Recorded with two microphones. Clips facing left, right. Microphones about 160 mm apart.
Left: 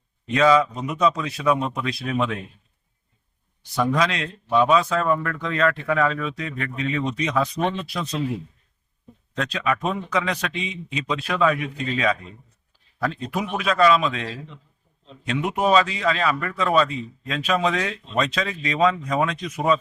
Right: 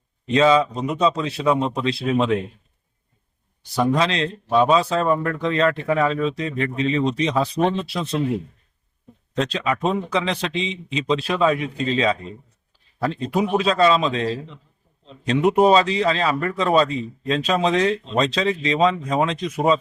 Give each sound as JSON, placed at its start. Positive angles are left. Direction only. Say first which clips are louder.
{"t": 0.3, "sound": "speech", "louder": "right 1 dB", "side_deg": -25}
{"t": 3.8, "sound": "speech", "louder": "right 2 dB", "side_deg": -30}
{"t": 9.4, "sound": "speech", "louder": "right 3 dB", "side_deg": -25}